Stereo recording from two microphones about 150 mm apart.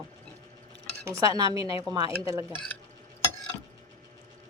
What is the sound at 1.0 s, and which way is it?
Speech, 20° right (ahead or behind).